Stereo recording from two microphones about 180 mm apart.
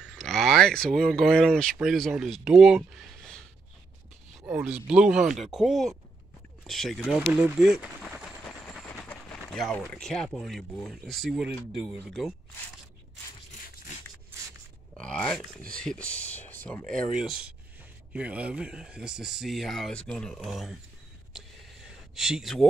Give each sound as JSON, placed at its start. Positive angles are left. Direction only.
{"t": 0.0, "sound": "speech", "side_deg": 0}
{"t": 4.5, "sound": "speech", "side_deg": -10}
{"t": 15.0, "sound": "speech", "side_deg": 5}
{"t": 21.3, "sound": "a sound", "side_deg": 0}